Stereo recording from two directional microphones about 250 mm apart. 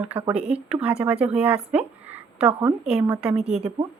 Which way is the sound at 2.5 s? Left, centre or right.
Right.